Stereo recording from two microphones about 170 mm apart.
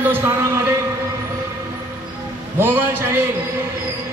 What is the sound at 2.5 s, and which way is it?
Speech, 15° right (ahead or behind).